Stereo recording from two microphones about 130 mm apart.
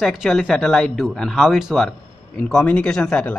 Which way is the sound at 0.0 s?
Centre (ahead or behind).